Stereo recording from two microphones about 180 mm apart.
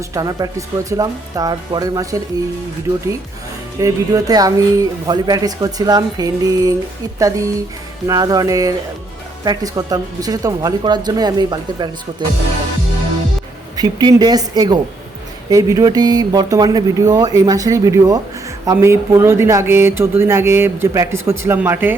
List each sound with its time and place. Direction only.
0.1 s speech: 20° right (ahead or behind)
3.8 s speech: 20° right (ahead or behind)
13.7 s speech: 20° right (ahead or behind)